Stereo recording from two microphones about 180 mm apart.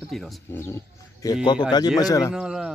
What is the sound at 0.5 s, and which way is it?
Goat, 15° left (ahead or behind).